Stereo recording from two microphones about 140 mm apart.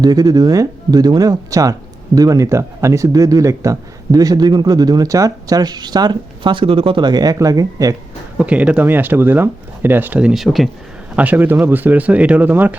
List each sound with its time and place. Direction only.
0.0 s speech: 25° right (ahead or behind)
8.4 s speech: 10° right (ahead or behind)